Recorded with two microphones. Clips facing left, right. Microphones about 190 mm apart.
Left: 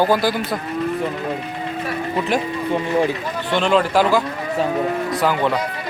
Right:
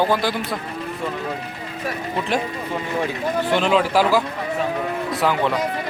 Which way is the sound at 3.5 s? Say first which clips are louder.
Left 2 dB; 5° right (ahead or behind).